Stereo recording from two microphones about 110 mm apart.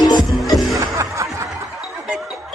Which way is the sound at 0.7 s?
30° right (ahead or behind).